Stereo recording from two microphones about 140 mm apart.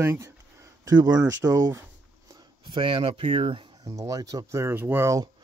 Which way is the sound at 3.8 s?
25° right (ahead or behind).